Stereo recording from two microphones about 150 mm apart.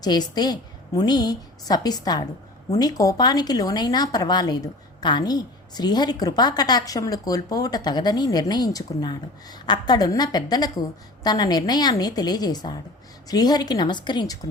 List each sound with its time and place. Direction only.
0.0 s speech: 25° left (ahead or behind)